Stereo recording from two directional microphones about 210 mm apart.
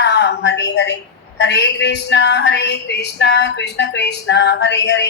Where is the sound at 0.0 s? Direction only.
55° left (ahead or behind).